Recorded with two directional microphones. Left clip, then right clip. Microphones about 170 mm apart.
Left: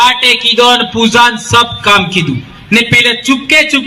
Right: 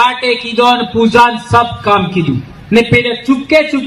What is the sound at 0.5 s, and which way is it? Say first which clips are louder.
Speech: left 2 dB; 20° left (ahead or behind).